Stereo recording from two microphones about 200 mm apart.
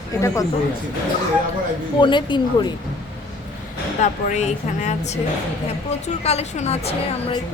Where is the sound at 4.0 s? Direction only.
35° left (ahead or behind).